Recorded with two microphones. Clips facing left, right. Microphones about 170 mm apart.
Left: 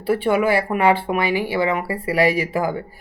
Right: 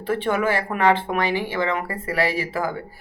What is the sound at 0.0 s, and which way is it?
A woman's voice, 10° left (ahead or behind).